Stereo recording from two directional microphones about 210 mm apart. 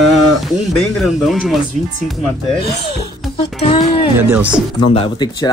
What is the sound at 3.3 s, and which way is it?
Speech, 25° left (ahead or behind).